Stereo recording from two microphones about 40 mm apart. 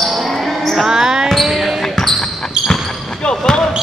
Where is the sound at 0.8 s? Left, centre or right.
Centre.